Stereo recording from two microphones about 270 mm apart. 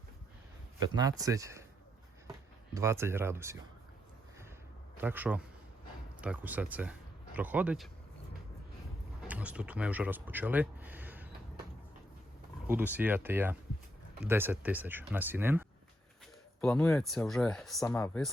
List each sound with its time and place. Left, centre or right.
0.8 s speech: centre
2.7 s speech: centre
4.9 s a man's voice: centre
9.2 s speech: centre
12.6 s speech: centre
16.6 s speech: centre